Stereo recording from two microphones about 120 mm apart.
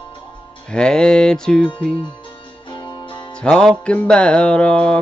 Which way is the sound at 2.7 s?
40° left (ahead or behind).